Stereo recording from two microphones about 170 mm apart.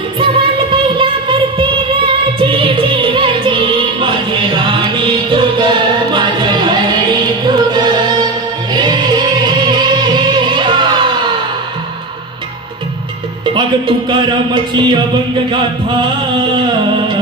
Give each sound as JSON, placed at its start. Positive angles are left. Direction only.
{"t": 0.2, "sound": "music", "side_deg": -30}
{"t": 13.6, "sound": "speech", "side_deg": -30}